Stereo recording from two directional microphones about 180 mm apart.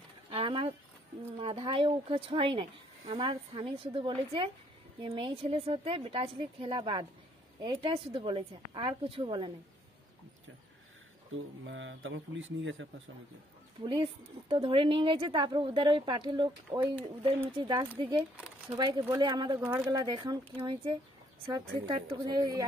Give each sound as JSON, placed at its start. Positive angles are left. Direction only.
{"t": 0.3, "sound": "a sound", "side_deg": -30}
{"t": 1.4, "sound": "a woman's voice", "side_deg": -30}
{"t": 11.3, "sound": "speech", "side_deg": -90}
{"t": 13.7, "sound": "a woman's voice", "side_deg": -30}